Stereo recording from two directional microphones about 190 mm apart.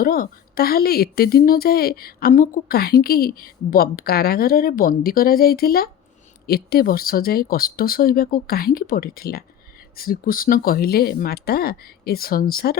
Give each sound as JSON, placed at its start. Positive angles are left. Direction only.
{"t": 0.0, "sound": "a woman's voice", "side_deg": 50}